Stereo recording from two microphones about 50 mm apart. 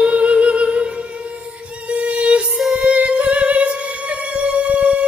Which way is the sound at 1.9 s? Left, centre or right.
Right.